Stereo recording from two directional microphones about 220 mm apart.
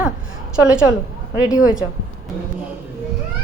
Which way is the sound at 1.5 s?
5° right (ahead or behind).